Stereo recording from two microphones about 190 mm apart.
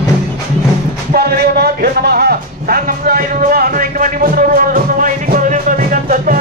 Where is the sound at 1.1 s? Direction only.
55° right (ahead or behind).